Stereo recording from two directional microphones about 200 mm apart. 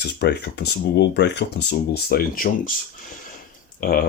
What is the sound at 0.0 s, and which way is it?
Speech, 55° left (ahead or behind).